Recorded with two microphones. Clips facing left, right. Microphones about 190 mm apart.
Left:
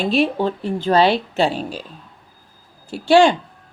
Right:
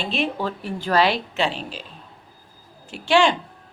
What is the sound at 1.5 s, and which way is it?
Speech, 45° left (ahead or behind).